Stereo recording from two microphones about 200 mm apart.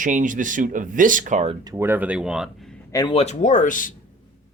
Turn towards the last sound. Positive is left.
turn(degrees=40)  # may be behind; listen again after turning